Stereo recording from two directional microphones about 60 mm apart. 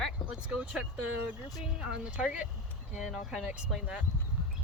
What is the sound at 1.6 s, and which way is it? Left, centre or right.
Speech, centre.